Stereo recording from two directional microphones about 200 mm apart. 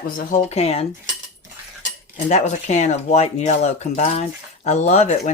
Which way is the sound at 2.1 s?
35° left (ahead or behind).